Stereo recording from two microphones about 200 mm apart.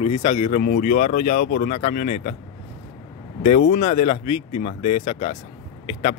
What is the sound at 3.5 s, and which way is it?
Speech, 40° left (ahead or behind).